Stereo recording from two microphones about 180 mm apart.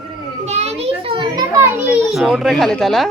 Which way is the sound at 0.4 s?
35° right (ahead or behind).